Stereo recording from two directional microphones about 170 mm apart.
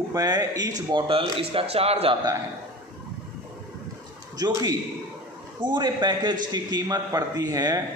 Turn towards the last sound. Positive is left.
turn(degrees=-20)  # may be behind; listen again after turning